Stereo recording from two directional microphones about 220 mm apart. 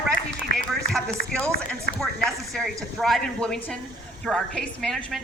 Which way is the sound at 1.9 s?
50° left (ahead or behind).